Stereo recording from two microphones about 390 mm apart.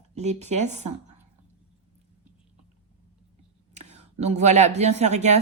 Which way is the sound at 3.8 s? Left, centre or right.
Centre.